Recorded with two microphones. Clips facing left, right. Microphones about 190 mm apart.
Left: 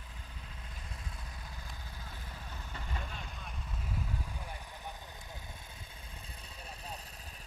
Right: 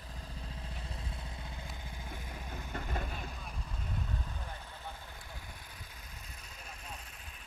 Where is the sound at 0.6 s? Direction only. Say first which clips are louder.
Right 4 dB; 30° right (ahead or behind).